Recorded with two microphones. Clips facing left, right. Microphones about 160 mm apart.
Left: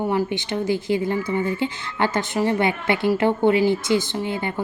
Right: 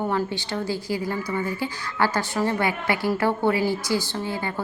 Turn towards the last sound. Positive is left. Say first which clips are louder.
# left 3 dB
turn(degrees=20)  # may be behind; listen again after turning